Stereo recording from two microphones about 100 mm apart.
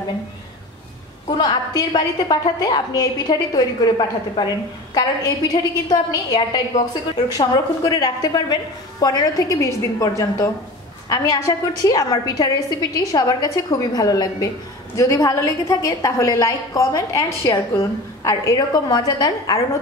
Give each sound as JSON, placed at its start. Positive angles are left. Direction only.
{"t": 1.4, "sound": "a woman's voice", "side_deg": 40}
{"t": 4.9, "sound": "a woman's voice", "side_deg": 40}